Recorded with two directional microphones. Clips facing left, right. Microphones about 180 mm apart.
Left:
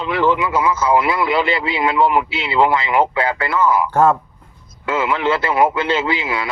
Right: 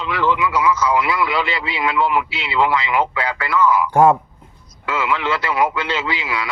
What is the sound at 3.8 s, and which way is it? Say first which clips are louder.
Speech: right 1 dB; 15° right (ahead or behind).